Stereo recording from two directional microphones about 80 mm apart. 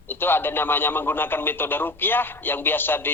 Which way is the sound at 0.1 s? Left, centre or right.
Left.